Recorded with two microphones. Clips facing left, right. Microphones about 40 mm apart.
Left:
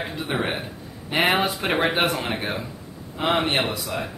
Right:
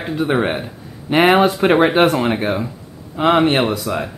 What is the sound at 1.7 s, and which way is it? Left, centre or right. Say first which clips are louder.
Speech: right 6 dB; right.